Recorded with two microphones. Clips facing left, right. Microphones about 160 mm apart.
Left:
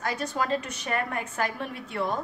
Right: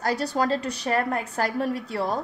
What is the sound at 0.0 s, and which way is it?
A woman's voice, 35° right (ahead or behind).